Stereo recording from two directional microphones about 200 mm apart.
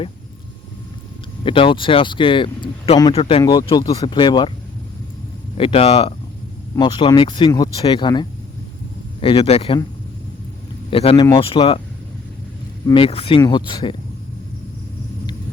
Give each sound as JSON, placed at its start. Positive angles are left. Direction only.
{"t": 1.5, "sound": "speech", "side_deg": 25}
{"t": 5.5, "sound": "speech", "side_deg": 30}
{"t": 10.9, "sound": "speech", "side_deg": 30}
{"t": 12.9, "sound": "speech", "side_deg": 25}